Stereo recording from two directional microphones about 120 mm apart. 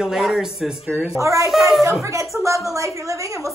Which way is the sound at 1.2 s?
25° right (ahead or behind).